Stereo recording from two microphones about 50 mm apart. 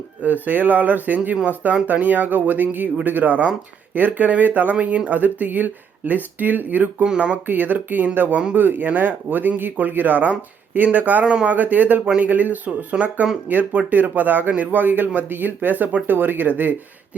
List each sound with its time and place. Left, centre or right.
0.2 s speech: right
7.0 s speech: right
7.4 s speech: right
12.0 s speech: right
12.3 s speech: right